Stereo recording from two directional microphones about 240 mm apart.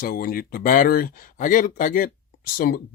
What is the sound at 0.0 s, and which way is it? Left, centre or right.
Speech, left.